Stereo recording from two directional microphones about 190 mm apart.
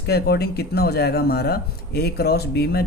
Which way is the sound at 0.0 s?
60° left (ahead or behind).